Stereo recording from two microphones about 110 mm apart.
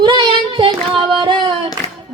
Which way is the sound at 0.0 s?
45° right (ahead or behind).